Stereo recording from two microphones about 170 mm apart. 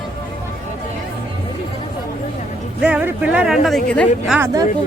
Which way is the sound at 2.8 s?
5° right (ahead or behind).